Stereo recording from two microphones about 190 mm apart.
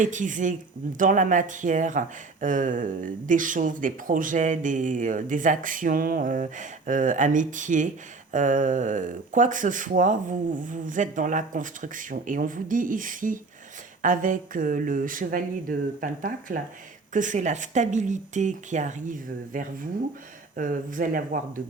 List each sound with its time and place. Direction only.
0.0 s speech: 40° right (ahead or behind)